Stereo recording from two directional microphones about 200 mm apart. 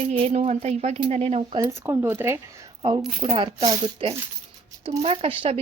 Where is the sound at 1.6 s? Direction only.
10° right (ahead or behind).